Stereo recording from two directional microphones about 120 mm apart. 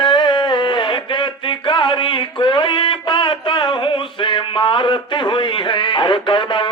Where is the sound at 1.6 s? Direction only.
45° left (ahead or behind).